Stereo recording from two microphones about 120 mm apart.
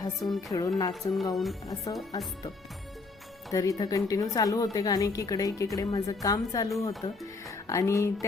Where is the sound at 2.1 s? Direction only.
30° left (ahead or behind).